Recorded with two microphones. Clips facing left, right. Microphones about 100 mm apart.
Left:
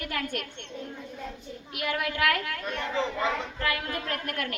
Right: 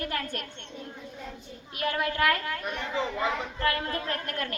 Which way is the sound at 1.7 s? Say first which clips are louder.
Right 2 dB; 35° right (ahead or behind).